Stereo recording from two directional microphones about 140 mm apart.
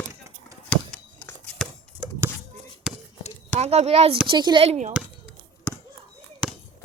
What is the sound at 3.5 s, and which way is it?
Speech, 50° right (ahead or behind).